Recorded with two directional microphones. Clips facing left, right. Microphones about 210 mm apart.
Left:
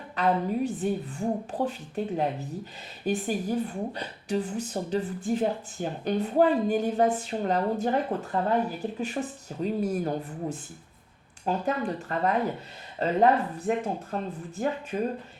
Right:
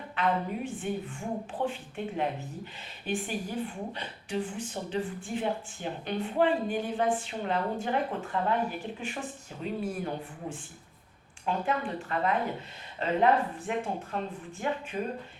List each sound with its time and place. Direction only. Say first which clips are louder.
0.2 s a woman's voice: left 5 dB; 40° left (ahead or behind)